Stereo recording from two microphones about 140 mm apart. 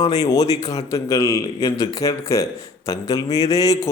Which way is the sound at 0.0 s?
25° left (ahead or behind).